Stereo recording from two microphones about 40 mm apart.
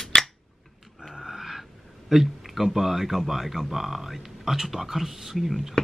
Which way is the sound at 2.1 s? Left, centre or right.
Centre.